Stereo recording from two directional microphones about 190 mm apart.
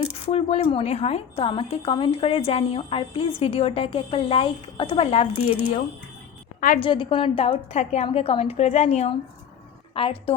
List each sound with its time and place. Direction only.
0.3 s speech: 35° left (ahead or behind)
6.8 s a woman's voice: 25° left (ahead or behind)